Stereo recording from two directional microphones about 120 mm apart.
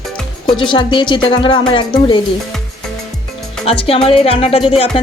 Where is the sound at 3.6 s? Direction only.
55° left (ahead or behind).